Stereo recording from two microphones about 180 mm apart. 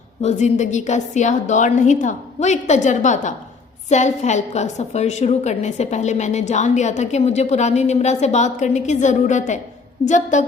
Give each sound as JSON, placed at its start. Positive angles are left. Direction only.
{"t": 0.2, "sound": "a woman's voice", "side_deg": 40}